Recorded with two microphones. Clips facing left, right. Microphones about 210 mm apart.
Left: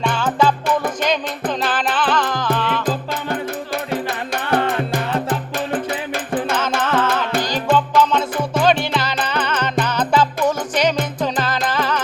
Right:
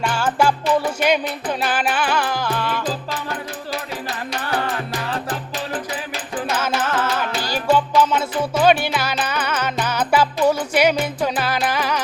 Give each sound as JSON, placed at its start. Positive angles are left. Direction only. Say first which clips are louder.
{"t": 0.0, "sound": "music", "louder": "left 1 dB", "side_deg": -10}
{"t": 4.9, "sound": "music", "louder": "left 5 dB", "side_deg": 60}
{"t": 6.8, "sound": "music", "louder": "left 3 dB", "side_deg": -10}